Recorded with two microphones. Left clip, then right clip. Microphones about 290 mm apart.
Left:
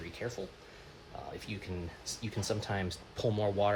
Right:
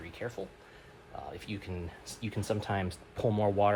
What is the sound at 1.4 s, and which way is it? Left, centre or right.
Speech, right.